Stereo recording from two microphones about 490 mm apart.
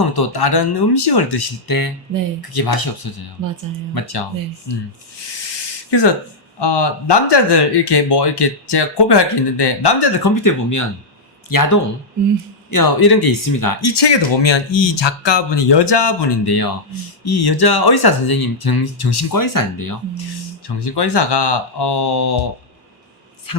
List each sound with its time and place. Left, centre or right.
0.0 s speech: left
5.9 s speech: left
20.7 s speech: left
23.5 s a man's voice: left